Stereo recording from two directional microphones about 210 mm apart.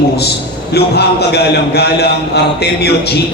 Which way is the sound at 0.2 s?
50° left (ahead or behind).